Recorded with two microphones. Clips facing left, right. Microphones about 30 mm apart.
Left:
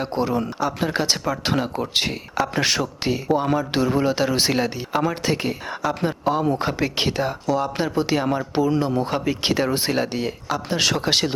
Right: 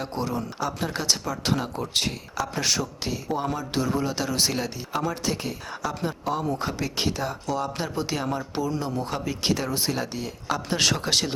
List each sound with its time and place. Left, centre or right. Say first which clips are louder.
0.0 s speech: left 6 dB; left
7.4 s speech: left 6 dB; centre; by 10.3 s left
10.5 s speech: left 2 dB; centre
11.0 s speech: left 4 dB; left